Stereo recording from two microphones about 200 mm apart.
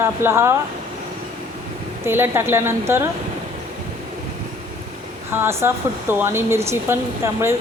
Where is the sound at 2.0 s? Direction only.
10° right (ahead or behind).